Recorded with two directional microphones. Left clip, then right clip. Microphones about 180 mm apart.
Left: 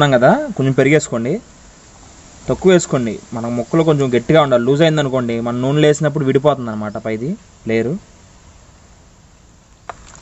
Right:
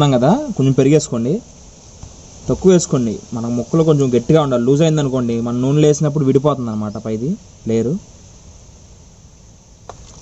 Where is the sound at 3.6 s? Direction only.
20° left (ahead or behind).